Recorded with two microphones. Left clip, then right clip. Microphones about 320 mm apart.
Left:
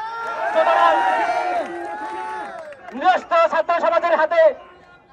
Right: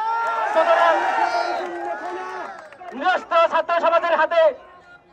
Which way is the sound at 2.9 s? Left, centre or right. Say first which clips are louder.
Left 2 dB; centre.